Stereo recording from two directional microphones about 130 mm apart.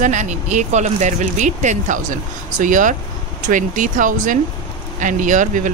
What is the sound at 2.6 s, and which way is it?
Speech, 85° right.